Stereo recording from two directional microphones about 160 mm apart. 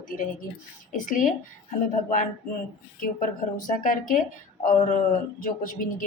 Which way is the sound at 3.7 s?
55° left (ahead or behind).